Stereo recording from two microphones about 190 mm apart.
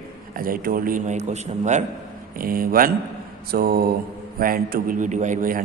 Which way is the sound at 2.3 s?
50° right (ahead or behind).